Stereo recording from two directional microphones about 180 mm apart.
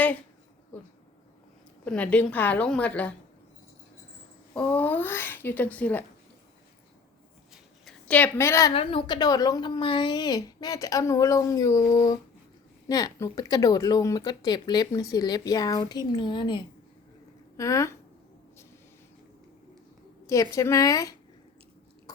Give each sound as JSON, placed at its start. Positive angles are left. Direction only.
{"t": 0.7, "sound": "speech", "side_deg": 10}
{"t": 4.5, "sound": "speech", "side_deg": 10}
{"t": 7.9, "sound": "a woman's voice", "side_deg": 5}
{"t": 8.7, "sound": "speech", "side_deg": 30}
{"t": 20.2, "sound": "speech", "side_deg": 15}